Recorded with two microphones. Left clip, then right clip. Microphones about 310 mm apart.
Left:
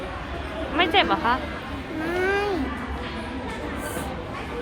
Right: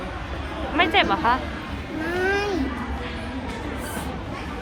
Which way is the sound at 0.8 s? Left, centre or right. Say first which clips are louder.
Right 1 dB; centre.